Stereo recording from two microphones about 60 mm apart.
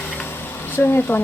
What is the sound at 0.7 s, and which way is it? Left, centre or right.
Speech, left.